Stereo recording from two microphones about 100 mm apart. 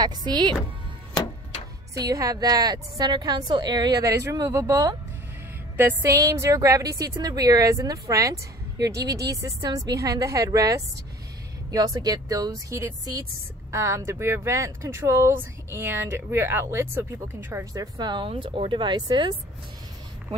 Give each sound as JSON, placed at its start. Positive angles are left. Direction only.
{"t": 0.0, "sound": "speech", "side_deg": -45}
{"t": 2.0, "sound": "a woman's voice", "side_deg": -35}
{"t": 6.1, "sound": "a woman's voice", "side_deg": -30}
{"t": 17.7, "sound": "speech", "side_deg": -45}
{"t": 18.3, "sound": "speech", "side_deg": -65}